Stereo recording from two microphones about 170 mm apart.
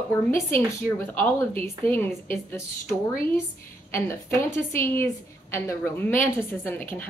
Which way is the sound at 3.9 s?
15° left (ahead or behind).